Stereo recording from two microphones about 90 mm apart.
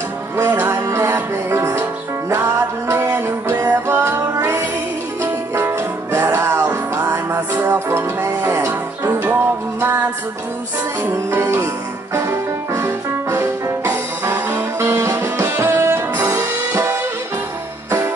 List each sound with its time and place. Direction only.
0.4 s music: 30° right (ahead or behind)
11.2 s music: 30° right (ahead or behind)